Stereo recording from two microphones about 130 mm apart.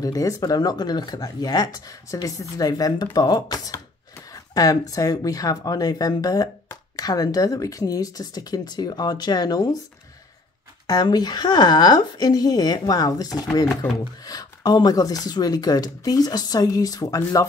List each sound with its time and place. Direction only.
0.0 s speech: 25° left (ahead or behind)
10.9 s speech: 30° left (ahead or behind)